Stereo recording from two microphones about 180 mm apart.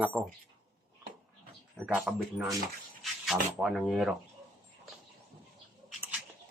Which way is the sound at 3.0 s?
Centre (ahead or behind).